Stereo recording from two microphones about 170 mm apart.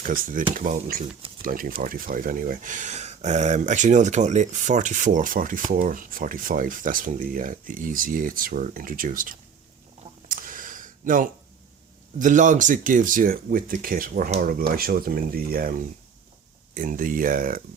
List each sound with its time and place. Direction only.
0.0 s speech: 50° right (ahead or behind)
10.2 s a sound: 55° right (ahead or behind)
12.2 s speech: 45° right (ahead or behind)
16.7 s speech: 50° right (ahead or behind)